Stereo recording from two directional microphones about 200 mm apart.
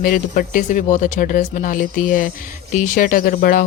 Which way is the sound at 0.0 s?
45° left (ahead or behind).